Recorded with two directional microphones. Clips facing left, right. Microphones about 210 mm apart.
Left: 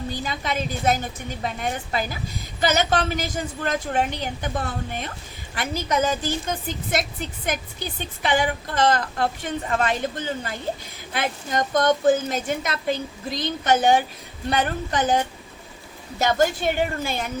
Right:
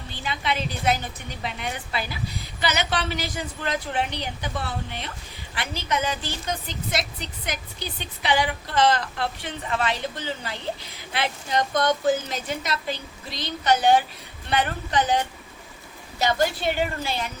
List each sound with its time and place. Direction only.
0.1 s a woman's voice: 40° left (ahead or behind)